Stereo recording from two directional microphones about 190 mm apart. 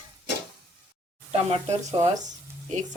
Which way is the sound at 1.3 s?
35° right (ahead or behind).